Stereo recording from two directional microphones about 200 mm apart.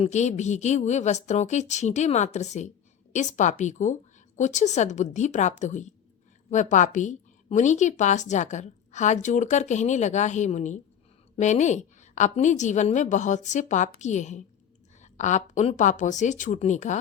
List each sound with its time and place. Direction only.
0.0 s a woman's voice: 35° left (ahead or behind)